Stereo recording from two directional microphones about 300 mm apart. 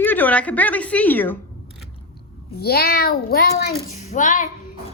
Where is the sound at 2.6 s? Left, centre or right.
Left.